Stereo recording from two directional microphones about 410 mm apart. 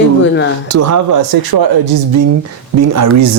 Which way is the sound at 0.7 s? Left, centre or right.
Right.